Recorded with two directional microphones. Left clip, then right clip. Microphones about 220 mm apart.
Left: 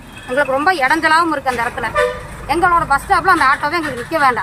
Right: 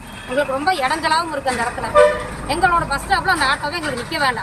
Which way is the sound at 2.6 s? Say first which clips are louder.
Left 4 dB; 30° left (ahead or behind).